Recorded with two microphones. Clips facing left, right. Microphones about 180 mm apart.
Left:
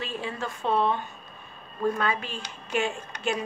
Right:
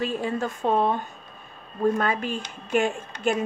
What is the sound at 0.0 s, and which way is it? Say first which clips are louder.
A woman's voice: right 6 dB; 45° right (ahead or behind).